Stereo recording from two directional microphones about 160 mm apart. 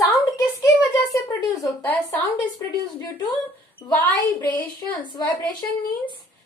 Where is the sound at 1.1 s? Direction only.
20° left (ahead or behind).